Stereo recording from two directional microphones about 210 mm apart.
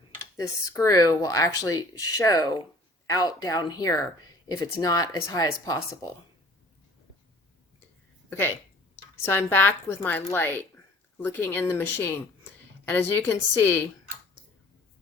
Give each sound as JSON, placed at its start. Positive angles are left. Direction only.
{"t": 0.3, "sound": "speech", "side_deg": 15}
{"t": 9.3, "sound": "a woman's voice", "side_deg": 10}